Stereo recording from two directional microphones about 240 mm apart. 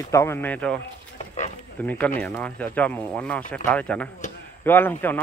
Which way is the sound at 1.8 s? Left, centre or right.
Centre.